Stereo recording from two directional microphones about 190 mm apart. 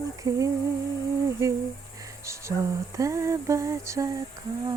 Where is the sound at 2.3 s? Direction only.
15° right (ahead or behind).